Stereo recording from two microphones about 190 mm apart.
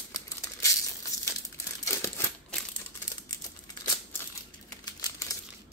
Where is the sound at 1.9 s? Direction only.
15° left (ahead or behind).